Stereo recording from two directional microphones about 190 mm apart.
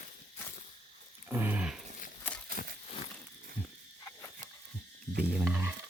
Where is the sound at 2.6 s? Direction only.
45° left (ahead or behind).